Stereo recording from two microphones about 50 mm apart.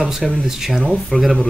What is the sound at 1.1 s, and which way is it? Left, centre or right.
Speech, left.